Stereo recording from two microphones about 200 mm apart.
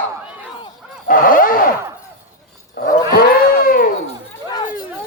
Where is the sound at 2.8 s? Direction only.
50° left (ahead or behind).